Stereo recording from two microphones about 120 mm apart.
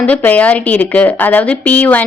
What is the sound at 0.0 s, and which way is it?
A woman's voice, 15° left (ahead or behind).